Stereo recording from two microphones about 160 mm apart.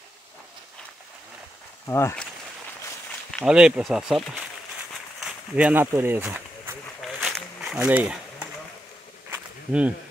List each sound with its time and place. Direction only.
1.9 s speech: 15° left (ahead or behind)
3.4 s speech: 5° right (ahead or behind)
7.0 s a sound: centre (ahead or behind)